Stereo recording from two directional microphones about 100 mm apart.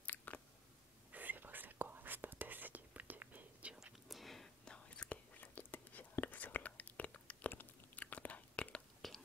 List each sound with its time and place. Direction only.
0.0 s a sound: 15° left (ahead or behind)
1.1 s whispering: 15° right (ahead or behind); by 8.8 s 15° left (ahead or behind)
9.0 s whispering: centre (ahead or behind)